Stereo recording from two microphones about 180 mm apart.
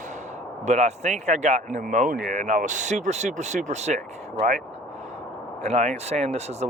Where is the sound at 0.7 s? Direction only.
40° right (ahead or behind).